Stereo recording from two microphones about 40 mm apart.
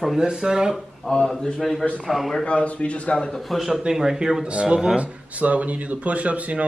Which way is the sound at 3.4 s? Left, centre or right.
Centre.